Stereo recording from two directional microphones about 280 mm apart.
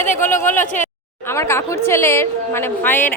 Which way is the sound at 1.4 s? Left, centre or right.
Centre.